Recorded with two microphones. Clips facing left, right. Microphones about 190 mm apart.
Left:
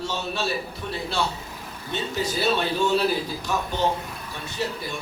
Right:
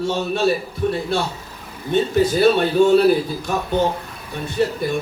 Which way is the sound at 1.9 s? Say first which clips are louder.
Right 11 dB; 55° right (ahead or behind).